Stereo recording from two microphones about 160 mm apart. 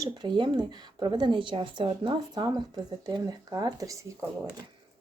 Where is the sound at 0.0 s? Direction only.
30° right (ahead or behind).